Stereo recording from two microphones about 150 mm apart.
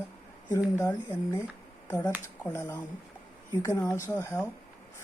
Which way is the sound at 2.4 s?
15° left (ahead or behind).